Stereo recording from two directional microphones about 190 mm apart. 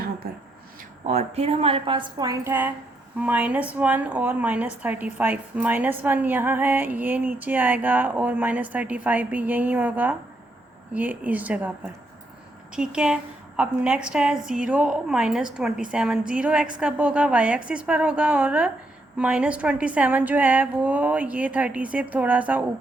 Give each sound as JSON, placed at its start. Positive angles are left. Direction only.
{"t": 1.0, "sound": "a woman's voice", "side_deg": -35}
{"t": 12.7, "sound": "a woman's voice", "side_deg": -5}